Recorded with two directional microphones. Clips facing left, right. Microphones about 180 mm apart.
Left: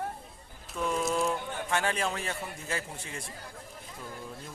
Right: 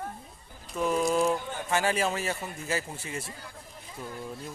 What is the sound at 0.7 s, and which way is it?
A man's voice, 5° right (ahead or behind).